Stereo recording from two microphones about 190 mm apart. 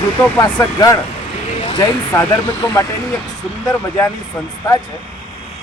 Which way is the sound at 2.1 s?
10° left (ahead or behind).